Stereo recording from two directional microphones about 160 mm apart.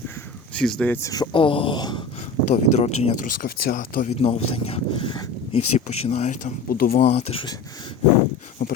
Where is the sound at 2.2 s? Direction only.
45° left (ahead or behind).